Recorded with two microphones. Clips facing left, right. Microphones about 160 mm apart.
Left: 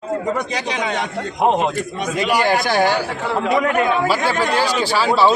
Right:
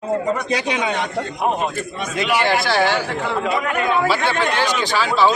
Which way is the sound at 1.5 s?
90° left.